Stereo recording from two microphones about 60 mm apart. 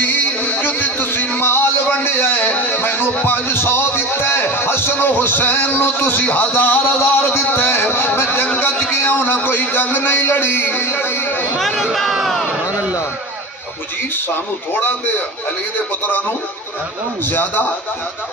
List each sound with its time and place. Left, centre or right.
0.0 s music: left
7.0 s a man's voice: left
8.5 s a sound: left
8.9 s a man's voice: left
11.5 s a sound: centre
16.0 s a man's voice: left